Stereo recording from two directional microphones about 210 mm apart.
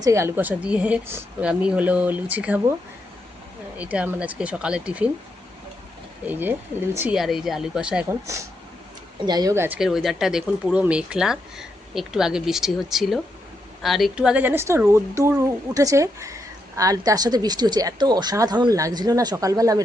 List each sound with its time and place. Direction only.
0.0 s speech: 15° right (ahead or behind)
3.8 s speech: 5° right (ahead or behind)
6.2 s speech: 10° right (ahead or behind)
9.2 s speech: 20° right (ahead or behind)